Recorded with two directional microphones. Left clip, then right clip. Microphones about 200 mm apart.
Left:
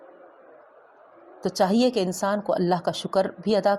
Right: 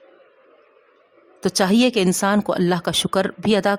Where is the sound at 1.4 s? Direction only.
30° right (ahead or behind).